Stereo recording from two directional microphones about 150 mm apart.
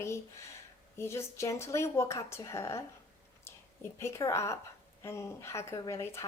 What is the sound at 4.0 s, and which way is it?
A woman's voice, 20° left (ahead or behind).